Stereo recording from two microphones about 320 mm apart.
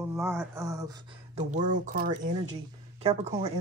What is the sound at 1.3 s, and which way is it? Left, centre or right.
Speech, right.